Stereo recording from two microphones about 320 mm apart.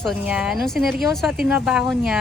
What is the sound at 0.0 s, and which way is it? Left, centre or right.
A woman's voice, centre.